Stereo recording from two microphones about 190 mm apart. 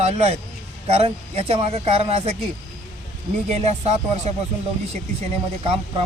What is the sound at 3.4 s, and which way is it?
Speech, 35° right (ahead or behind).